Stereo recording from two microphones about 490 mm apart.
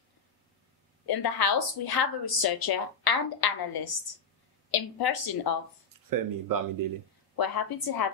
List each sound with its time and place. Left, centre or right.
1.0 s speech: left
6.0 s speech: right
7.3 s speech: left